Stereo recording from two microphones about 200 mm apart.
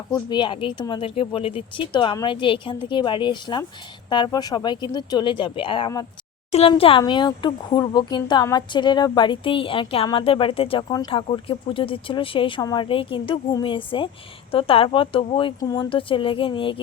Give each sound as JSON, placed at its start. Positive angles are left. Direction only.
{"t": 0.1, "sound": "speech", "side_deg": 25}